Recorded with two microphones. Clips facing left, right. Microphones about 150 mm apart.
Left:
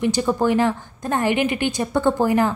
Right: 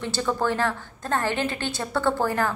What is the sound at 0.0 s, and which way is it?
A woman's voice, 15° left (ahead or behind).